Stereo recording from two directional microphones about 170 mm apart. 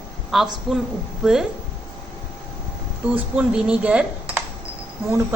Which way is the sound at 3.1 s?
5° right (ahead or behind).